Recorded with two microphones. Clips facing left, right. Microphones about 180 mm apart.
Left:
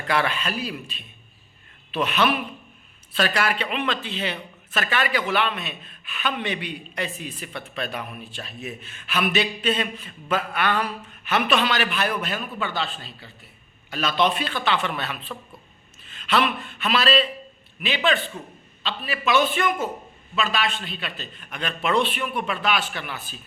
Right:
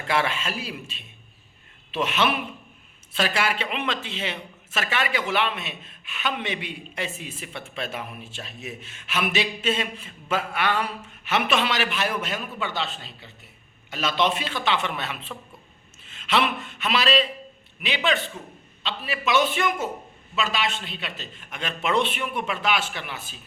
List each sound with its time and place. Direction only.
0.1 s a man's voice: 25° right (ahead or behind)
16.0 s a sound: 25° right (ahead or behind)
16.6 s a man's voice: 20° right (ahead or behind)